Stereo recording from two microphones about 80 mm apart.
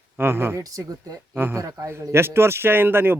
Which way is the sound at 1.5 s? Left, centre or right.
Right.